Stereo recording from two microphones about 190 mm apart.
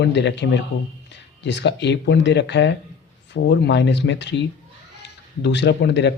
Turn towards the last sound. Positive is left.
turn(degrees=65)  # may be behind; listen again after turning